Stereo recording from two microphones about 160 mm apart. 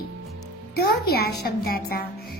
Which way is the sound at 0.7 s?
75° left (ahead or behind).